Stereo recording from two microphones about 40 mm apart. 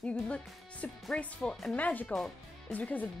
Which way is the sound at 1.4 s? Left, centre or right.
Centre.